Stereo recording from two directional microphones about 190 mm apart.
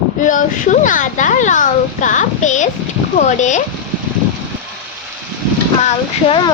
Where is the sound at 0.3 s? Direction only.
40° left (ahead or behind).